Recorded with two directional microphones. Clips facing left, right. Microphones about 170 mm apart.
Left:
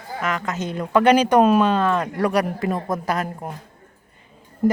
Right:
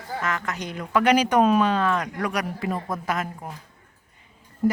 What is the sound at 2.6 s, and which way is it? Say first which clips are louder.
Speech: left 4 dB; 45° left (ahead or behind).